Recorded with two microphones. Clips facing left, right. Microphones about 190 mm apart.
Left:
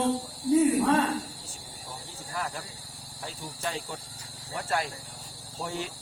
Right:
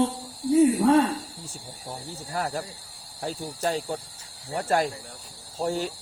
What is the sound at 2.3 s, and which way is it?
Speech, 40° right (ahead or behind).